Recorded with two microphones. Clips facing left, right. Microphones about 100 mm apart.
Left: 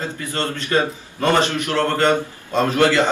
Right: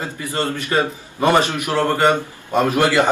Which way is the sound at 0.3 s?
15° right (ahead or behind).